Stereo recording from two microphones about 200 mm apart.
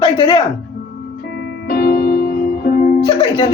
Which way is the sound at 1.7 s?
50° left (ahead or behind).